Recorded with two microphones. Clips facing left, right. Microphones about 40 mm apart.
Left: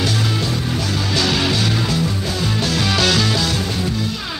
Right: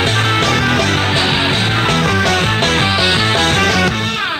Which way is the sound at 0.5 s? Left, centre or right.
Right.